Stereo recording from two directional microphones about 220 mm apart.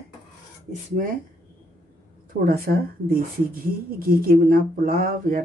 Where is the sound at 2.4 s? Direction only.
40° right (ahead or behind).